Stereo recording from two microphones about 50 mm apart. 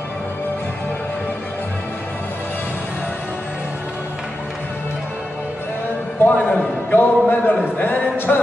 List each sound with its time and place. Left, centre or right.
6.2 s a man's voice: left